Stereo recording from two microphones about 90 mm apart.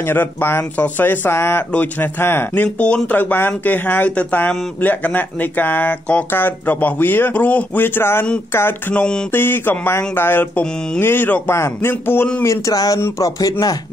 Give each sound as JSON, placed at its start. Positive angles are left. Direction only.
{"t": 0.0, "sound": "speech", "side_deg": 25}
{"t": 12.4, "sound": "a man's voice", "side_deg": 40}